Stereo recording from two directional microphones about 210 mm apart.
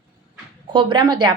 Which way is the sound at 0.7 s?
20° right (ahead or behind).